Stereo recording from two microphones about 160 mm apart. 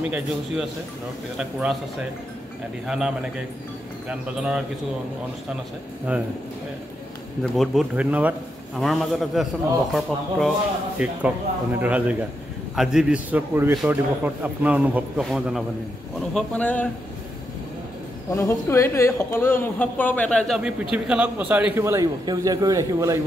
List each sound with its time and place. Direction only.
1.4 s a man's voice: 5° right (ahead or behind)
6.1 s a man's voice: 10° right (ahead or behind)
7.5 s a man's voice: centre (ahead or behind)
18.3 s a man's voice: 15° left (ahead or behind); by 23.1 s 20° right (ahead or behind)